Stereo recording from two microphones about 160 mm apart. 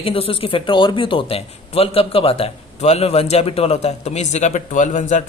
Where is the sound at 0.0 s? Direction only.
35° left (ahead or behind).